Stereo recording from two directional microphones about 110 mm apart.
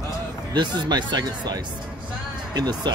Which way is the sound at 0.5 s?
40° right (ahead or behind).